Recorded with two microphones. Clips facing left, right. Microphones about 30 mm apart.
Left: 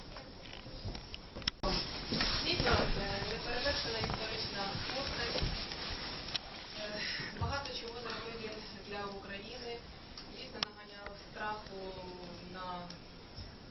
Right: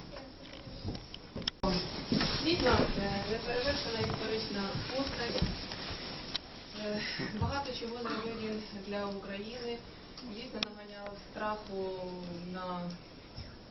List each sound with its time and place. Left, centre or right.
1.4 s speech: centre
5.8 s a sound: centre
6.7 s speech: centre